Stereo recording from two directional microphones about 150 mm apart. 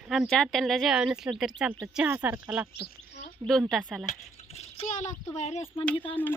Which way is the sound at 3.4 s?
35° right (ahead or behind).